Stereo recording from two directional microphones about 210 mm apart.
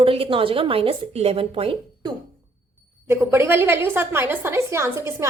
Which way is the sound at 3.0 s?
10° right (ahead or behind).